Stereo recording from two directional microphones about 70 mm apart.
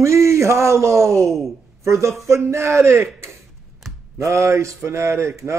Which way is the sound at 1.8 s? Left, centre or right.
Right.